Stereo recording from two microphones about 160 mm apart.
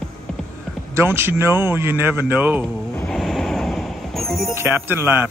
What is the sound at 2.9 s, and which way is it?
Music, centre (ahead or behind).